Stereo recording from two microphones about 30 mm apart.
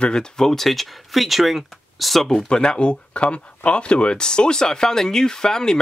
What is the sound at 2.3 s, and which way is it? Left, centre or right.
Speech, left.